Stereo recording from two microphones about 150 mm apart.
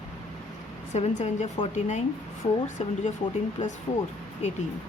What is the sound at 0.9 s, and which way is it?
Speech, 50° left (ahead or behind).